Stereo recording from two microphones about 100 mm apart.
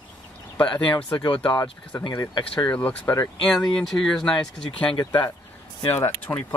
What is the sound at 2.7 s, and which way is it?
Speech, 15° left (ahead or behind).